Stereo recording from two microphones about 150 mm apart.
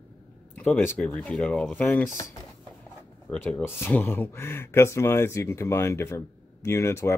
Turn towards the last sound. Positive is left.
turn(degrees=20)  # may be behind; listen again after turning